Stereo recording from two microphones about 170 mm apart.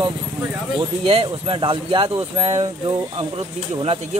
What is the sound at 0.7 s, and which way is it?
Speech, 35° right (ahead or behind).